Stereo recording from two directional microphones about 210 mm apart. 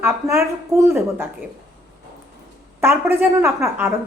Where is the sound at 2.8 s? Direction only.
10° right (ahead or behind).